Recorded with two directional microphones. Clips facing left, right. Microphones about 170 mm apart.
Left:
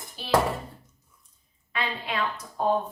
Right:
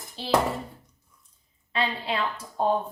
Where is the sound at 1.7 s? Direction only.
30° right (ahead or behind).